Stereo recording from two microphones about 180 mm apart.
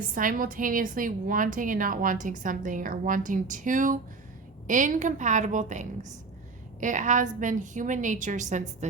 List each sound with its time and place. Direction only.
0.1 s a woman's voice: 50° right (ahead or behind)